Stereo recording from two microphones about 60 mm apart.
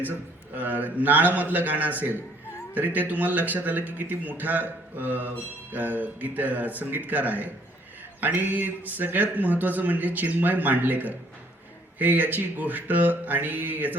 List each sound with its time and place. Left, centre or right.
0.0 s a man's voice: right